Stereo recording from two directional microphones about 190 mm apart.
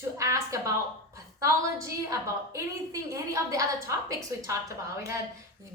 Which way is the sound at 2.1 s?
15° right (ahead or behind).